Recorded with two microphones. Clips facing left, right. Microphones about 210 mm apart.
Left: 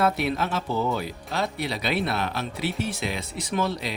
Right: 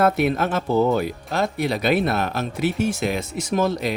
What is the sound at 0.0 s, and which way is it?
Speech, 50° right (ahead or behind).